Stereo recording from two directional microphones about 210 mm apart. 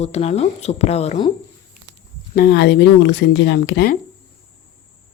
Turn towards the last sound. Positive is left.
turn(degrees=50)  # may be behind; listen again after turning